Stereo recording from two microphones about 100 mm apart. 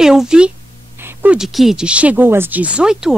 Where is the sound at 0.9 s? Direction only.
25° right (ahead or behind).